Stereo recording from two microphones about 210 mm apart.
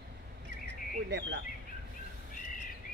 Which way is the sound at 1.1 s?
55° right (ahead or behind).